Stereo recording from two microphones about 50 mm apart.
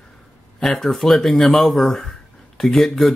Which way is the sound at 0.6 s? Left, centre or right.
Centre.